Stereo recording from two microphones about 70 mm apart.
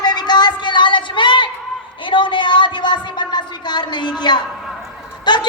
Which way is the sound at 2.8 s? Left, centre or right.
Left.